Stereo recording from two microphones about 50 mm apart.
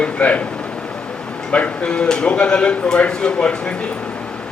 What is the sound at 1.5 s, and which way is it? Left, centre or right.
A man's voice, left.